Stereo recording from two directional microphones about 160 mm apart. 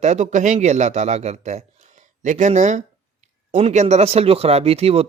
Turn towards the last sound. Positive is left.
turn(degrees=-40)  # may be behind; listen again after turning